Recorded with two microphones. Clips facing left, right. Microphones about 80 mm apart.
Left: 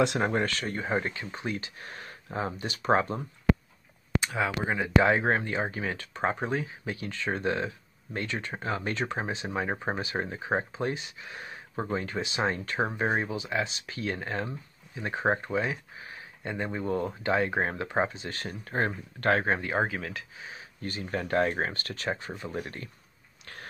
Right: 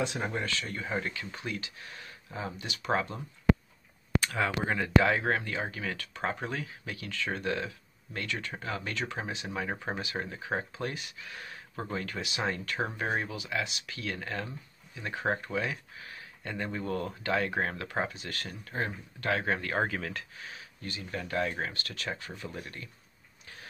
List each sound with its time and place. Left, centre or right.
0.2 s speech: left
4.2 s speech: centre
5.0 s speech: left
19.4 s speech: left
19.7 s speech: centre
20.8 s speech: left